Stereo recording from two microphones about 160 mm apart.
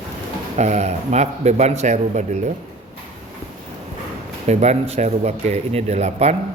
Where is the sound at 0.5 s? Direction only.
45° right (ahead or behind).